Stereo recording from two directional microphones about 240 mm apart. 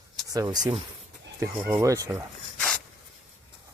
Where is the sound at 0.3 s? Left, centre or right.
Centre.